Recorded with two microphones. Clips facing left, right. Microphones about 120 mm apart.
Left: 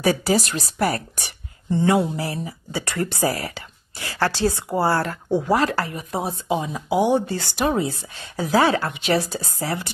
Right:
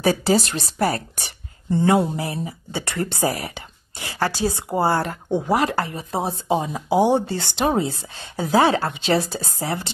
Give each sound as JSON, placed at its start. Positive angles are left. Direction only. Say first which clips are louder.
{"t": 0.0, "sound": "speech", "louder": "right 1 dB", "side_deg": -30}
{"t": 1.8, "sound": "mantra", "louder": "right 1 dB", "side_deg": -35}
{"t": 2.1, "sound": "speech", "louder": "right 1 dB", "side_deg": -25}